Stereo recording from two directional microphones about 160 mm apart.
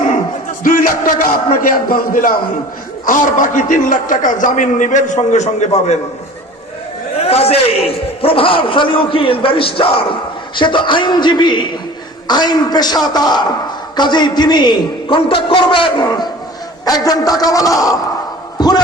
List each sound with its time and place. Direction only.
0.6 s a man's voice: 60° left (ahead or behind); by 6.0 s 45° left (ahead or behind)
7.2 s a man's voice: 40° left (ahead or behind); by 17.9 s 20° left (ahead or behind)
18.5 s music: 25° left (ahead or behind)